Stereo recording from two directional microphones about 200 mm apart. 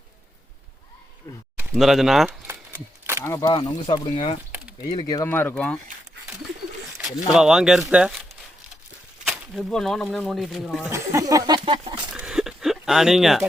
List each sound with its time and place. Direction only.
1.7 s speech: centre (ahead or behind)
2.7 s a sound: 15° right (ahead or behind)
3.2 s speech: 15° left (ahead or behind)
7.0 s speech: 5° right (ahead or behind)
9.6 s speech: centre (ahead or behind)
10.8 s speech: 15° right (ahead or behind)
12.1 s a sound: 5° right (ahead or behind)